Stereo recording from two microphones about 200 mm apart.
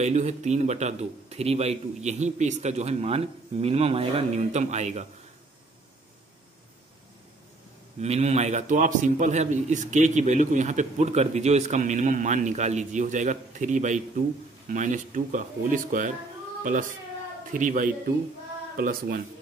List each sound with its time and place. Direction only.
0.0 s a man's voice: 35° right (ahead or behind)
8.0 s a man's voice: 35° right (ahead or behind)